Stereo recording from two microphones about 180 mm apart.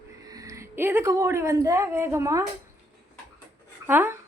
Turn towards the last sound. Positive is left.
turn(degrees=-10)  # may be behind; listen again after turning